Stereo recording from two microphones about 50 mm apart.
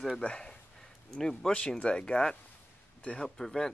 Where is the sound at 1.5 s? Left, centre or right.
Left.